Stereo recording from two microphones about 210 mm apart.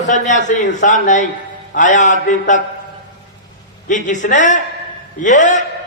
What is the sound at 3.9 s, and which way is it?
A man's voice, 35° left (ahead or behind).